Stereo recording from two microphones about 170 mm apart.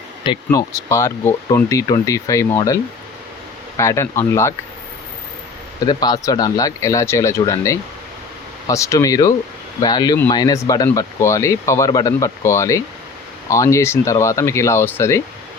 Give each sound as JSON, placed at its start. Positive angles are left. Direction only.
{"t": 0.3, "sound": "speech", "side_deg": 20}
{"t": 3.8, "sound": "speech", "side_deg": 15}
{"t": 5.8, "sound": "speech", "side_deg": 25}